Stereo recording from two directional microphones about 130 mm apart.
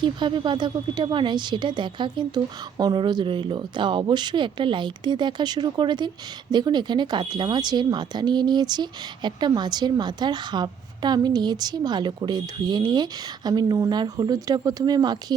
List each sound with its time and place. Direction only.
0.0 s speech: 35° right (ahead or behind)